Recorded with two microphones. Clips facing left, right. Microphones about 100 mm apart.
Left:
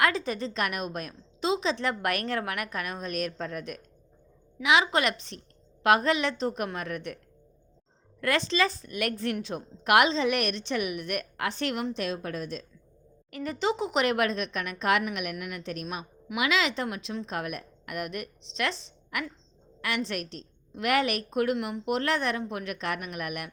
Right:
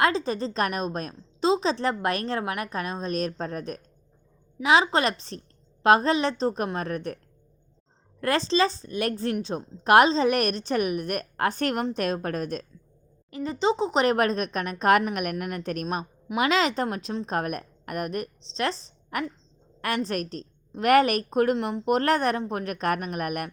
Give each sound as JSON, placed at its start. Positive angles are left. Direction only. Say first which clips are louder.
{"t": 0.0, "sound": "a woman's voice", "louder": "right 3 dB", "side_deg": -30}
{"t": 8.2, "sound": "a woman's voice", "louder": "right 3 dB", "side_deg": -35}
{"t": 13.3, "sound": "a woman's voice", "louder": "right 4 dB", "side_deg": -25}